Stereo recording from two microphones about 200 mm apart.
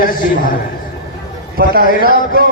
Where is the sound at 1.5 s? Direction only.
45° right (ahead or behind).